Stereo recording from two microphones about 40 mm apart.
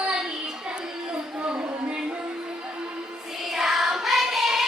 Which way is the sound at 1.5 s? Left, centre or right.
Right.